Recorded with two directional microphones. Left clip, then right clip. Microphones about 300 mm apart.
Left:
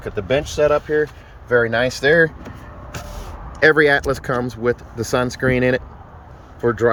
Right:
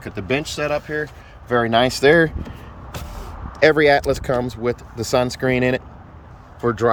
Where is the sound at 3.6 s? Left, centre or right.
Centre.